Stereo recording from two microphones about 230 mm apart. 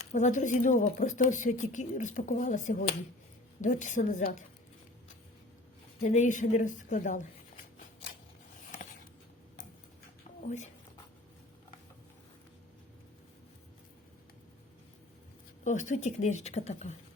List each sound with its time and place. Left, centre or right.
0.0 s speech: left
6.0 s a sound: left
10.4 s a woman's voice: left
15.6 s speech: left